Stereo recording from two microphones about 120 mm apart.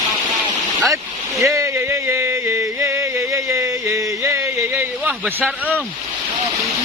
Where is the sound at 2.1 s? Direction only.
20° right (ahead or behind).